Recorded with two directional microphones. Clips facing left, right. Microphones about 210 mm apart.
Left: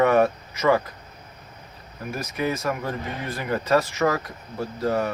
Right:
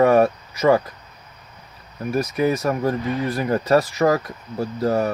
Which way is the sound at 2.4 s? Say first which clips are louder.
Right 4 dB; 35° right (ahead or behind).